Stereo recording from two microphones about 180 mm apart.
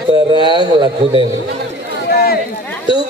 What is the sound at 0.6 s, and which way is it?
Speech, 25° right (ahead or behind).